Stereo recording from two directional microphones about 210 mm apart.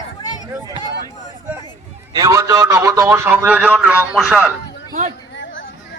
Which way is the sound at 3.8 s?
5° right (ahead or behind).